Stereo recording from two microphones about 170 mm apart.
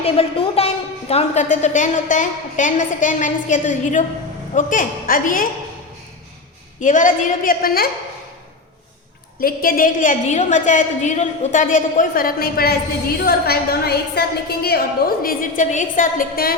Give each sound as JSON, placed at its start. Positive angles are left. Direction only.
{"t": 0.0, "sound": "a woman's voice", "side_deg": 35}
{"t": 6.7, "sound": "a woman's voice", "side_deg": 50}
{"t": 9.4, "sound": "a woman's voice", "side_deg": 60}